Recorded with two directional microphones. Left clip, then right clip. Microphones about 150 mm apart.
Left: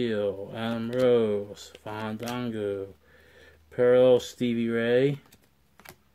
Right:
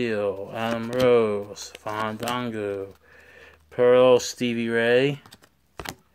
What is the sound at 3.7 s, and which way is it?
Speech, 50° right (ahead or behind).